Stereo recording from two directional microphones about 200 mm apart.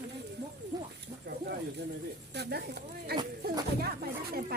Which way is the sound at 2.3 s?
55° right (ahead or behind).